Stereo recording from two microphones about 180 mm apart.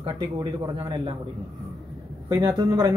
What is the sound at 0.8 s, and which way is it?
Speech, 25° right (ahead or behind).